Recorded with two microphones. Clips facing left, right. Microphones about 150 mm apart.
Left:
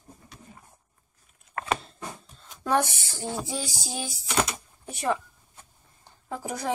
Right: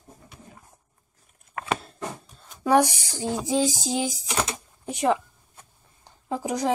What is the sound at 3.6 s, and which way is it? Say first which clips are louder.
Music: right 10 dB; 20° right (ahead or behind).